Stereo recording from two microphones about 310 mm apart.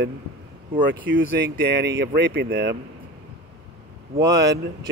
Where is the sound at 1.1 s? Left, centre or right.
Right.